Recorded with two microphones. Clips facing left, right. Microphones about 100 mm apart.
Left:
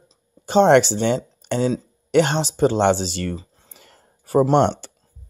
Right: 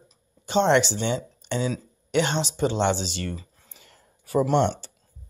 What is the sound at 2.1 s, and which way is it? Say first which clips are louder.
Speech: left 6 dB; 45° left (ahead or behind).